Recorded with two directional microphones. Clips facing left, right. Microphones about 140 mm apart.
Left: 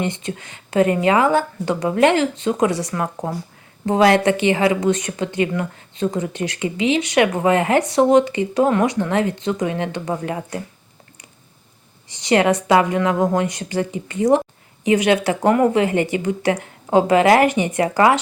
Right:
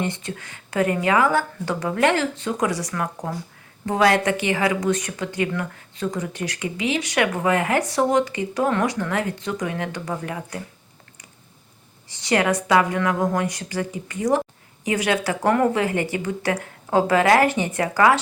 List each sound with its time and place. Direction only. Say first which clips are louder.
0.0 s a woman's voice: left 3 dB; 20° left (ahead or behind)
12.0 s a woman's voice: left 4 dB; 20° left (ahead or behind)